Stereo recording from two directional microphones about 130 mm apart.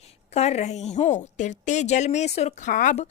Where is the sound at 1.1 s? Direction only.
70° left (ahead or behind).